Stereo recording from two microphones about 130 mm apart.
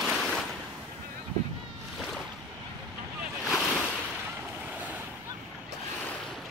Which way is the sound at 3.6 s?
15° left (ahead or behind).